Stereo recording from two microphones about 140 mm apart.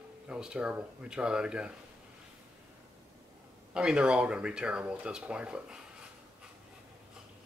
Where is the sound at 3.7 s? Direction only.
5° right (ahead or behind).